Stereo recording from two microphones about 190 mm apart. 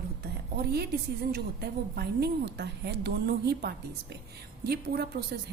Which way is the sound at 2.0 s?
60° right (ahead or behind).